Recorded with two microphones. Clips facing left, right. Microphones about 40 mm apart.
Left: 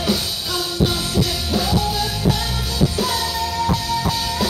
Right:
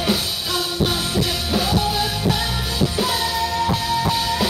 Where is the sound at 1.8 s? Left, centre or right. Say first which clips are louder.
Even; centre.